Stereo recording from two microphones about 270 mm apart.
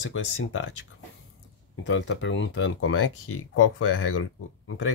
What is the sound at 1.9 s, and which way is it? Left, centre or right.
Speech, left.